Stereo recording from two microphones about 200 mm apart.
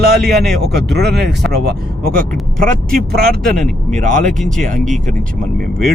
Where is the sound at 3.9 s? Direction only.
40° right (ahead or behind).